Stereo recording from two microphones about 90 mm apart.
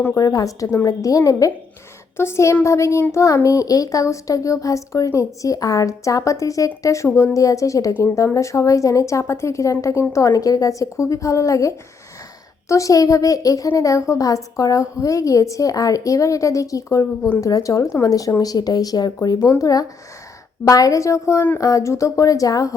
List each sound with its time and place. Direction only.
0.2 s a woman's voice: 40° left (ahead or behind)